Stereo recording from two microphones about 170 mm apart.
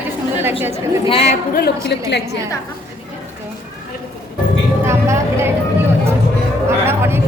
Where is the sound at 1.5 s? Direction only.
75° left (ahead or behind).